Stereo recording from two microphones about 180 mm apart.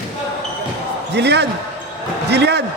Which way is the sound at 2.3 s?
65° right (ahead or behind).